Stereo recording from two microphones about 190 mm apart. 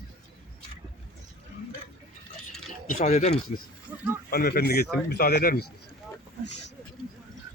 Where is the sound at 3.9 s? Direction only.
10° right (ahead or behind).